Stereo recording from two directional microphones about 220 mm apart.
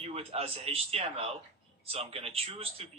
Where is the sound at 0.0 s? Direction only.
25° right (ahead or behind).